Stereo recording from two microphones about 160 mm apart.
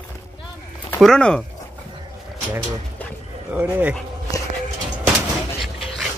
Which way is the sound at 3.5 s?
10° right (ahead or behind).